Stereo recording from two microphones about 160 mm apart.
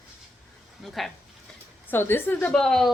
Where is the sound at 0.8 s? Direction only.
Centre (ahead or behind).